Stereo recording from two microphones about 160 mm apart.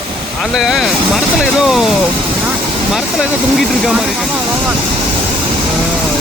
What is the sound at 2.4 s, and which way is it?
Vehicle, centre (ahead or behind).